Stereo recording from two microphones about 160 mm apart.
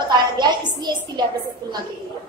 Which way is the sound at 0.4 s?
25° right (ahead or behind).